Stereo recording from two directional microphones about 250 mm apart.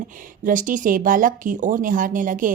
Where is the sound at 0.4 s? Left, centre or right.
Right.